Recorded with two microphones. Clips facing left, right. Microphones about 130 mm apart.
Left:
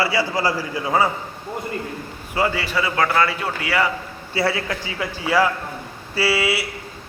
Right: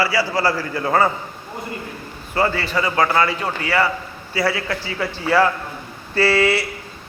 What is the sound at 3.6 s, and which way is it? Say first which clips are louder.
Speech: right 2 dB; 10° left (ahead or behind).